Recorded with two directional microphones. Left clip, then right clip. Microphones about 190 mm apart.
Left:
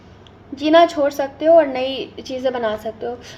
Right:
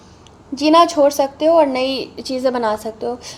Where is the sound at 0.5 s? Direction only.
35° right (ahead or behind).